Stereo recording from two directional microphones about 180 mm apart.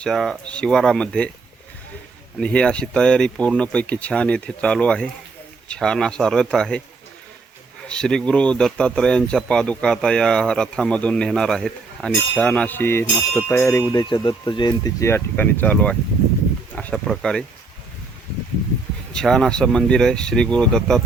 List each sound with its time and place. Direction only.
0.0 s speech: centre (ahead or behind)
2.4 s speech: 5° left (ahead or behind)
7.9 s speech: 5° left (ahead or behind)
13.9 s speech: 25° left (ahead or behind); by 17.4 s centre (ahead or behind)
19.1 s speech: centre (ahead or behind)